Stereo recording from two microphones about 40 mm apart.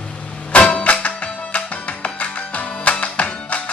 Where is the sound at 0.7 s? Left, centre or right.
Left.